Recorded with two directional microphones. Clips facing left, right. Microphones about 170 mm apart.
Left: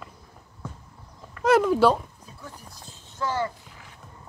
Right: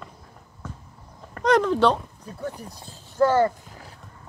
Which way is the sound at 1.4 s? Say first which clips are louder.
Even; 5° left (ahead or behind).